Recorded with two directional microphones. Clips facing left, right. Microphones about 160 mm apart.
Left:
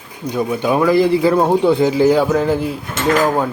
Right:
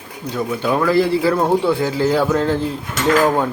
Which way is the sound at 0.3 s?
15° left (ahead or behind).